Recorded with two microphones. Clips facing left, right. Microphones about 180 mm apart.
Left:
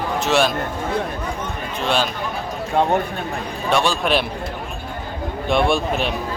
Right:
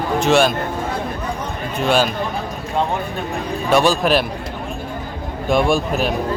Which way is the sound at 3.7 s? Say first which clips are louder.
Right 5 dB; 40° right (ahead or behind).